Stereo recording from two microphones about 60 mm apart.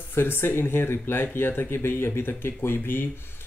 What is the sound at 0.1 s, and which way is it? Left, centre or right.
Speech, left.